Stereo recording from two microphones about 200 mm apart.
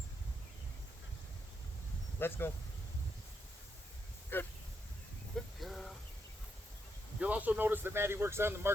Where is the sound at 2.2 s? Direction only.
10° left (ahead or behind).